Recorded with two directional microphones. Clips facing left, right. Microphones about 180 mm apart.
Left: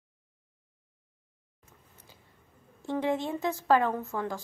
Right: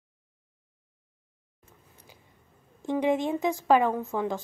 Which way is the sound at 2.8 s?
15° right (ahead or behind).